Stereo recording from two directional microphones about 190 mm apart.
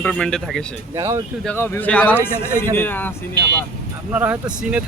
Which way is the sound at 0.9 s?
15° right (ahead or behind).